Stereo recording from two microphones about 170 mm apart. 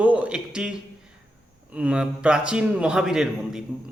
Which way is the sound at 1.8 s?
5° right (ahead or behind).